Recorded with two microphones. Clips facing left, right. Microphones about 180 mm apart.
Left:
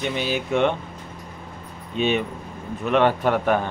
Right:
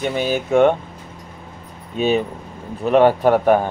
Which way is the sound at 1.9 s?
40° right (ahead or behind).